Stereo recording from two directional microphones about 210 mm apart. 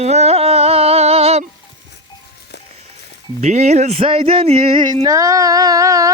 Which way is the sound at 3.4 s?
30° right (ahead or behind).